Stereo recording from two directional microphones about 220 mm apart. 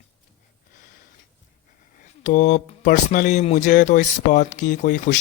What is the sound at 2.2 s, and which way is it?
Speech, 35° left (ahead or behind).